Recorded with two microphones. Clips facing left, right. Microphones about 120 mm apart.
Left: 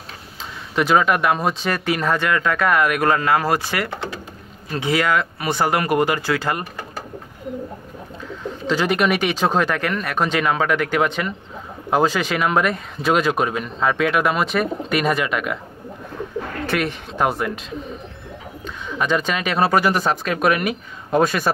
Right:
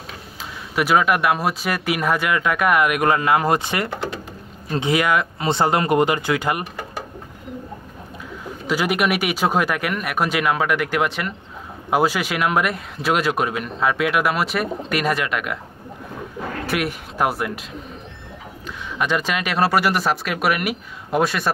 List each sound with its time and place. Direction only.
0.7 s speech: 5° right (ahead or behind)
8.6 s speech: 10° right (ahead or behind)
16.6 s speech: 5° right (ahead or behind)
18.9 s speech: 5° right (ahead or behind)